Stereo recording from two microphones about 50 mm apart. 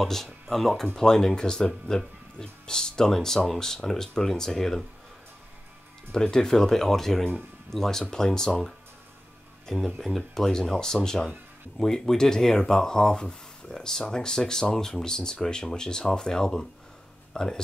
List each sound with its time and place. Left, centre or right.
0.0 s speech: centre
6.1 s speech: centre
9.9 s speech: centre